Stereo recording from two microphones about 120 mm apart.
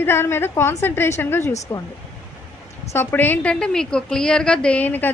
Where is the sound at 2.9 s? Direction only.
20° left (ahead or behind).